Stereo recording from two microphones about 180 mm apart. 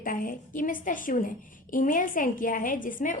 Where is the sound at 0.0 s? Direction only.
50° left (ahead or behind).